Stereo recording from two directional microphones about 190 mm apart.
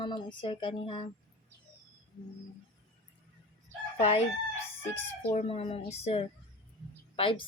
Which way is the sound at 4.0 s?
35° left (ahead or behind).